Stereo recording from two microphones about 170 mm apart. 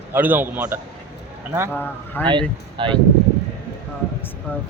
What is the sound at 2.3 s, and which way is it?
Speech, 30° right (ahead or behind).